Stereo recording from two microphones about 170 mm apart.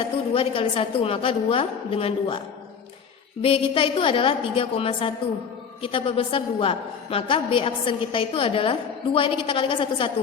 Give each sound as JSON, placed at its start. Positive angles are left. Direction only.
{"t": 0.0, "sound": "a woman's voice", "side_deg": 30}
{"t": 3.4, "sound": "a woman's voice", "side_deg": 30}